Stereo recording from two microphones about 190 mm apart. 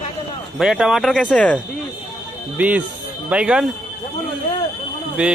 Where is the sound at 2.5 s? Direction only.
5° right (ahead or behind).